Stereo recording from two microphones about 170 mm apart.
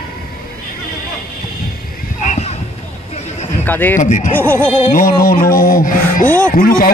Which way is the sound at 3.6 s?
10° left (ahead or behind).